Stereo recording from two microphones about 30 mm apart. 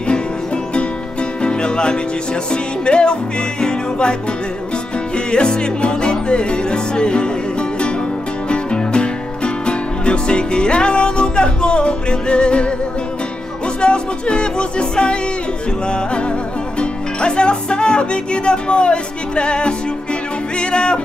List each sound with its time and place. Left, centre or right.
1.4 s music: left
13.7 s music: left
16.8 s speech: left
20.5 s music: left